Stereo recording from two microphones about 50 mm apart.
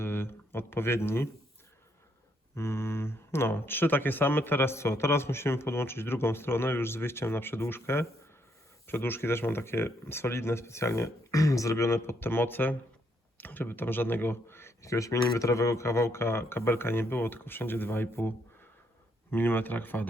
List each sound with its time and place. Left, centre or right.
0.0 s speech: left
2.6 s speech: left
7.7 s speech: left
8.9 s speech: left
11.5 s speech: left
14.8 s speech: left